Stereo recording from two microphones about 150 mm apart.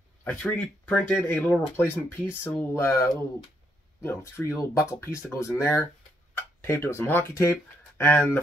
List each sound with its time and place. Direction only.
0.2 s speech: 10° left (ahead or behind)